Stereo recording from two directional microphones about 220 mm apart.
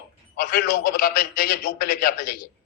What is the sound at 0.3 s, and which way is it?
Speech, 40° left (ahead or behind).